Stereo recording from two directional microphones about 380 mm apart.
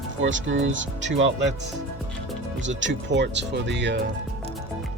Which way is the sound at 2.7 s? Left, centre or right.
Right.